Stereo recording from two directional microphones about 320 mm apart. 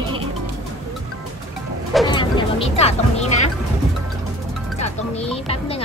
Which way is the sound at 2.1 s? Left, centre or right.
Centre.